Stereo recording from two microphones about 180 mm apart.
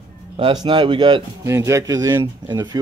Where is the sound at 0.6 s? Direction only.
25° right (ahead or behind).